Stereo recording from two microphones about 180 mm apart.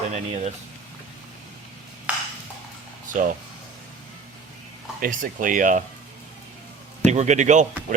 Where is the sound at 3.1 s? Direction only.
45° right (ahead or behind).